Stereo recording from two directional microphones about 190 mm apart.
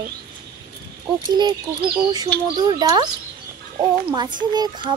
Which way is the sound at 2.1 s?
20° right (ahead or behind).